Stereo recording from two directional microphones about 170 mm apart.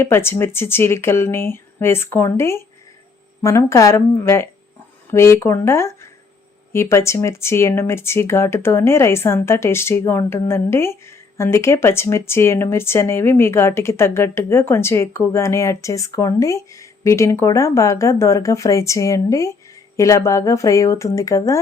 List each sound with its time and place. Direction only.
0.0 s speech: 15° left (ahead or behind)